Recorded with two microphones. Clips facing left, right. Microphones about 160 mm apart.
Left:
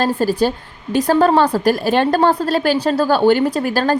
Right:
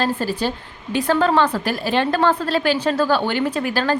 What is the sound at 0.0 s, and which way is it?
A woman's voice, 40° left (ahead or behind).